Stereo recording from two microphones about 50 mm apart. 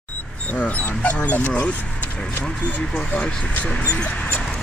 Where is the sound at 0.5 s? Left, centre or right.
Left.